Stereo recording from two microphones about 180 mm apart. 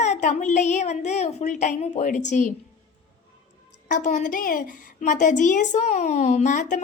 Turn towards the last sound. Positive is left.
turn(degrees=45)  # may be behind; listen again after turning